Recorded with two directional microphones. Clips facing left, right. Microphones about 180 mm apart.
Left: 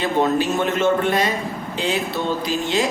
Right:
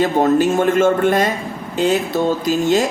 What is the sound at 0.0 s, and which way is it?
A man's voice, 45° right (ahead or behind).